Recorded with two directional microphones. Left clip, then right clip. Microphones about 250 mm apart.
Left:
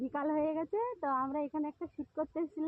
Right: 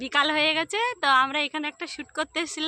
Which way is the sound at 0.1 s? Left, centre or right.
Right.